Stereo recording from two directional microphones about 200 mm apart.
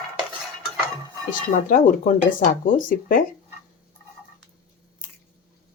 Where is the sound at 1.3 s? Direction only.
40° left (ahead or behind).